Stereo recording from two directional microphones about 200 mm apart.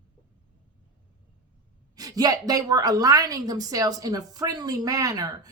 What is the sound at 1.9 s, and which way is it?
A woman's voice, 20° right (ahead or behind).